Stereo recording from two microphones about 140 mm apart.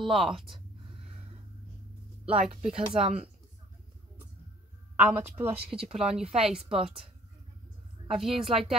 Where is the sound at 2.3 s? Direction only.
45° right (ahead or behind).